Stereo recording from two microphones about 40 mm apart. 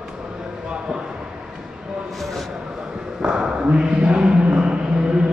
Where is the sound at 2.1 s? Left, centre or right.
Centre.